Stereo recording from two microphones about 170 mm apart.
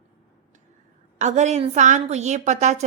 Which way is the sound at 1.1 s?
45° right (ahead or behind).